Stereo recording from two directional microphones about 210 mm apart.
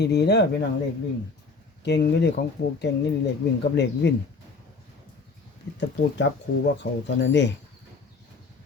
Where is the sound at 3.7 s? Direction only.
55° left (ahead or behind).